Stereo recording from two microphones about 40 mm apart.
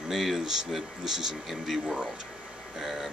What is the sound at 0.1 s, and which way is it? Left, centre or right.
Speech, centre.